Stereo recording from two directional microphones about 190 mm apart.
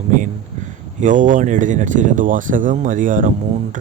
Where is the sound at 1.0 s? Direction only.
40° right (ahead or behind).